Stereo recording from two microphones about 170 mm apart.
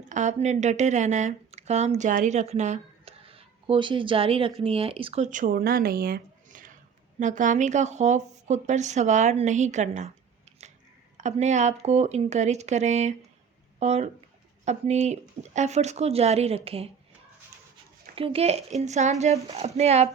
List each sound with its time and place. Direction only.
0.1 s speech: 45° right (ahead or behind)
11.2 s speech: 45° right (ahead or behind)
18.1 s speech: 35° right (ahead or behind)